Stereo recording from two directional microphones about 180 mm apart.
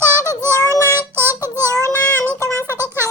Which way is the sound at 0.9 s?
10° right (ahead or behind).